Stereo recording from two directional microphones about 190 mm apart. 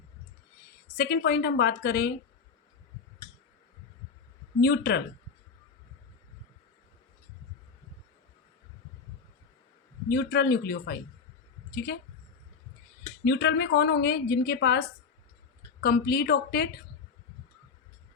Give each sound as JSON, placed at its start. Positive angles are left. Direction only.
{"t": 0.9, "sound": "a woman's voice", "side_deg": 55}
{"t": 4.6, "sound": "a woman's voice", "side_deg": 60}
{"t": 10.1, "sound": "a woman's voice", "side_deg": 55}
{"t": 13.2, "sound": "a woman's voice", "side_deg": 60}